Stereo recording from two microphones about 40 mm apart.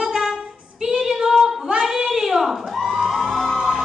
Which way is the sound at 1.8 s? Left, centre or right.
Centre.